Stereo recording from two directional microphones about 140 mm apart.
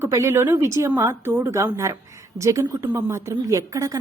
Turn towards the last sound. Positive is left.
turn(degrees=-25)  # may be behind; listen again after turning